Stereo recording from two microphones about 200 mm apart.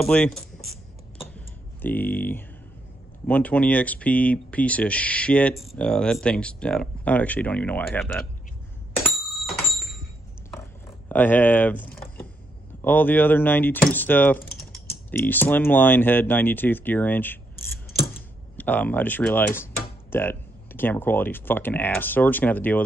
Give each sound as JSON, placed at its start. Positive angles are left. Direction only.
{"t": 0.0, "sound": "speech", "side_deg": 5}
{"t": 1.3, "sound": "a sound", "side_deg": 10}
{"t": 3.3, "sound": "speech", "side_deg": 5}
{"t": 8.9, "sound": "doorbell", "side_deg": 5}
{"t": 10.5, "sound": "a sound", "side_deg": 10}
{"t": 12.8, "sound": "speech", "side_deg": 10}
{"t": 17.9, "sound": "mechanisms", "side_deg": 50}
{"t": 18.6, "sound": "speech", "side_deg": 10}